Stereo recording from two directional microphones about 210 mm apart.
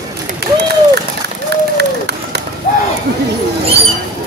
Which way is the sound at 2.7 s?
35° left (ahead or behind).